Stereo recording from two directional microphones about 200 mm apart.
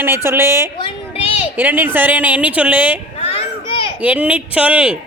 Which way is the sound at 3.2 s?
30° left (ahead or behind).